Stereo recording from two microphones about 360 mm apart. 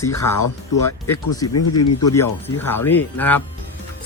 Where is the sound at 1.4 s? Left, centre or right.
Left.